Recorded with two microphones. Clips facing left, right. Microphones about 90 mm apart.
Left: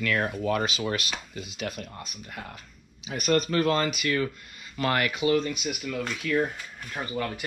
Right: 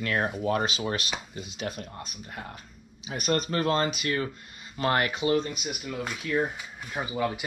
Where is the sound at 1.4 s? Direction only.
35° right (ahead or behind).